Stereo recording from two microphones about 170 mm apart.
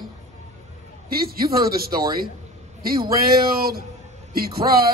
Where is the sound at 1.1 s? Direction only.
60° right (ahead or behind).